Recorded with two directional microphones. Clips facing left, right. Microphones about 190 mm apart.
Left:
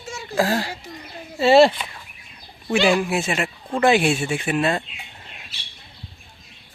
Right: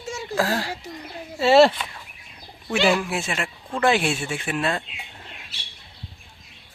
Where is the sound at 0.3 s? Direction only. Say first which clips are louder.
Left 3 dB; 10° left (ahead or behind).